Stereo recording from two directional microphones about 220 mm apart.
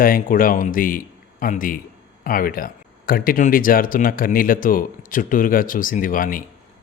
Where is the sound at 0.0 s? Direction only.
40° left (ahead or behind).